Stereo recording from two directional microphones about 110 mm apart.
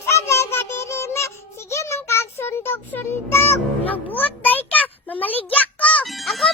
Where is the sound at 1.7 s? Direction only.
25° left (ahead or behind).